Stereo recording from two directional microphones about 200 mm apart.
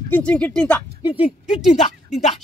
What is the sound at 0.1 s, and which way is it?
Speech, 5° left (ahead or behind).